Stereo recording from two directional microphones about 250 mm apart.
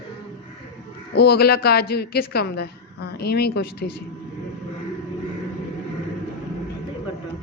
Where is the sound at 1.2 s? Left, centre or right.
Left.